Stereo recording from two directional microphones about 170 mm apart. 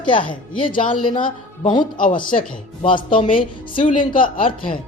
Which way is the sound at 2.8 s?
30° left (ahead or behind).